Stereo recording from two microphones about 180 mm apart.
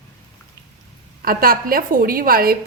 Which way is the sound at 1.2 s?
55° right (ahead or behind).